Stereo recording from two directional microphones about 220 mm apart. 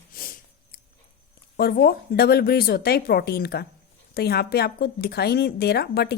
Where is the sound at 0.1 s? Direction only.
40° left (ahead or behind).